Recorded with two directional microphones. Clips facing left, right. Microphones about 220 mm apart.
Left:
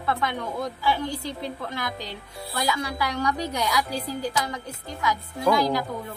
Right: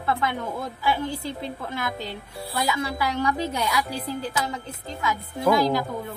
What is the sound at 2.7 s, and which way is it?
A woman's voice, 25° right (ahead or behind).